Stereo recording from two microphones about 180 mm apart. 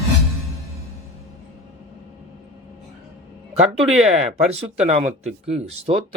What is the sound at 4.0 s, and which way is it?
Speech, 35° right (ahead or behind).